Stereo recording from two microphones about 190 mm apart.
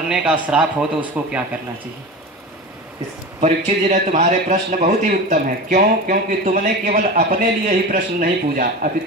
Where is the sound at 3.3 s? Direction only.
35° right (ahead or behind).